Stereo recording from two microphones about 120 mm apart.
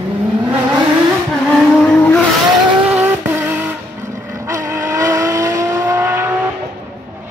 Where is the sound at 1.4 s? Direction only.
5° left (ahead or behind).